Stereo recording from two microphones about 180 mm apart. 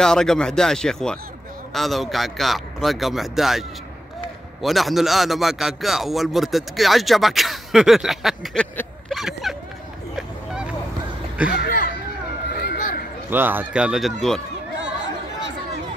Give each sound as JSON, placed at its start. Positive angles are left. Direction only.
{"t": 0.0, "sound": "a man's voice", "side_deg": 5}
{"t": 9.1, "sound": "a sound", "side_deg": 0}
{"t": 10.1, "sound": "vehicle", "side_deg": -5}
{"t": 11.5, "sound": "speech", "side_deg": 50}
{"t": 12.6, "sound": "a sound", "side_deg": 55}
{"t": 13.3, "sound": "a man's voice", "side_deg": -10}